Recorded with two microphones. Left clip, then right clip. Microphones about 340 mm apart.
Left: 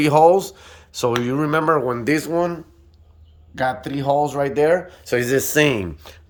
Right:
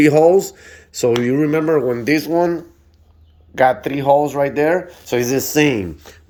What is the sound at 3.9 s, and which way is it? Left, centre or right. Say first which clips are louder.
Speech: right 5 dB; centre.